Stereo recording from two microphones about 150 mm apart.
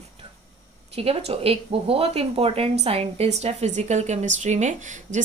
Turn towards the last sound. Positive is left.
turn(degrees=-55)  # may be behind; listen again after turning